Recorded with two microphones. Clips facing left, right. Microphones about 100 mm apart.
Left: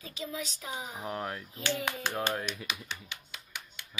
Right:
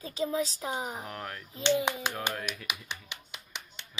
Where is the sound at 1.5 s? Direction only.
25° right (ahead or behind).